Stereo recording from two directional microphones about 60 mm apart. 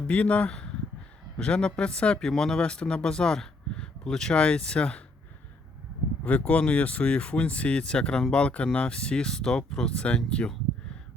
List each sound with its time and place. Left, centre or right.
0.1 s speech: left
6.2 s speech: left